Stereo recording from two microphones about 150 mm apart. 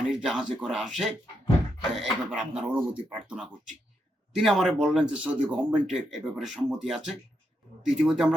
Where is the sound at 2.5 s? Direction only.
40° right (ahead or behind).